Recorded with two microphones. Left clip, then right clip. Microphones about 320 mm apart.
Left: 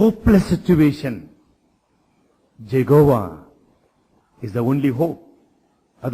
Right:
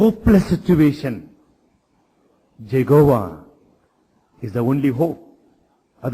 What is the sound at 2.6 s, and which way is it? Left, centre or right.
A man's voice, left.